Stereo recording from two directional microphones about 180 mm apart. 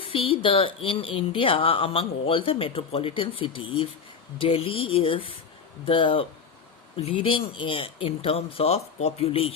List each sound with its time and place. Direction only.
0.0 s speech: 30° left (ahead or behind)